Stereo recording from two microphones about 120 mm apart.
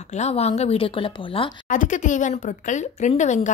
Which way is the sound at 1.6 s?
90° left.